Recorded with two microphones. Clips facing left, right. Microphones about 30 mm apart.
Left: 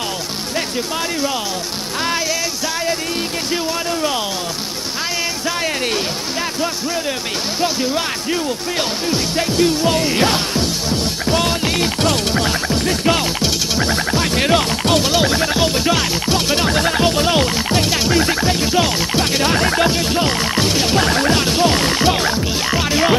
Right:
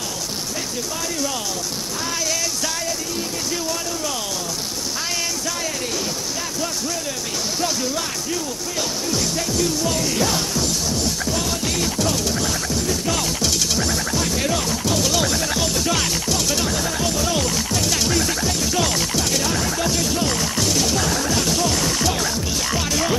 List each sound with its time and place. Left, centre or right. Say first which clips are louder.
7.6 s speech: left 6 dB; left
11.6 s music: left 5 dB; left
15.0 s music: left 5 dB; left
19.2 s music: left 6 dB; left
19.9 s music: left 4 dB; left